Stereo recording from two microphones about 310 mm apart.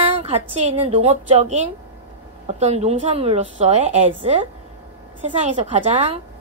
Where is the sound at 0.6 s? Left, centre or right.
Centre.